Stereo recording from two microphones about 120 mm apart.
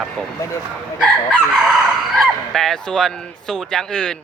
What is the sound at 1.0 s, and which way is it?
Crowing, centre (ahead or behind).